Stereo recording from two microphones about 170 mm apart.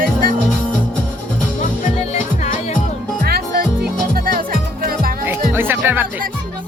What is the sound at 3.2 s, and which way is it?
Music, 60° right (ahead or behind).